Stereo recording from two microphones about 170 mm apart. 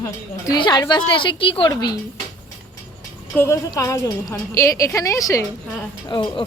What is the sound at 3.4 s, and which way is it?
A woman's voice, 15° left (ahead or behind).